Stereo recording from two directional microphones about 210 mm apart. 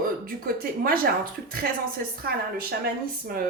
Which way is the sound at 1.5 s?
45° right (ahead or behind).